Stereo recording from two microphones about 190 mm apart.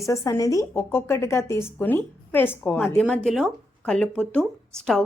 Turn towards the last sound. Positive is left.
turn(degrees=0)  # may be behind; listen again after turning